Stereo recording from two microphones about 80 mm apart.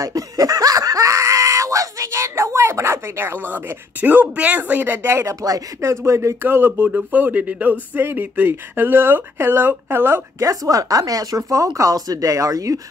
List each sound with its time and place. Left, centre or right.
0.0 s speech: right
6.9 s speech: centre
10.4 s speech: right